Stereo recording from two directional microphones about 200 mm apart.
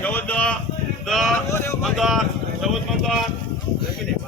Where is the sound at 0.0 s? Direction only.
10° left (ahead or behind).